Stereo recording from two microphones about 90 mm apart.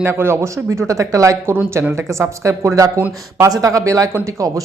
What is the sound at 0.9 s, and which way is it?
Speech, 35° right (ahead or behind).